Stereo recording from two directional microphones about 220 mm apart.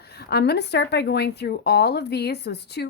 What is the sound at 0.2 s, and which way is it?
A woman's voice, 45° left (ahead or behind).